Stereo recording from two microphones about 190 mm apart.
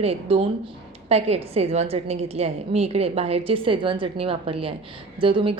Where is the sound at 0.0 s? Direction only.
30° right (ahead or behind).